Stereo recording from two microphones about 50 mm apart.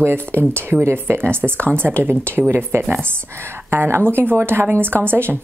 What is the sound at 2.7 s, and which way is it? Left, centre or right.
Speech, right.